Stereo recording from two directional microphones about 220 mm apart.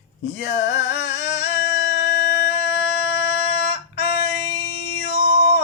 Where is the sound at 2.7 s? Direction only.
55° left (ahead or behind).